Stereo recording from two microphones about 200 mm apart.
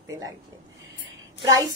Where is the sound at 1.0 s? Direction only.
20° right (ahead or behind).